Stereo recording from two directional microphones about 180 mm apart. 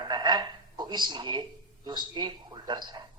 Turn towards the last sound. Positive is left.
turn(degrees=-25)  # may be behind; listen again after turning